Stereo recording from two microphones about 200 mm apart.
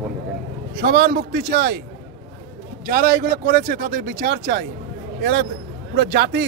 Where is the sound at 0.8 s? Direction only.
55° right (ahead or behind).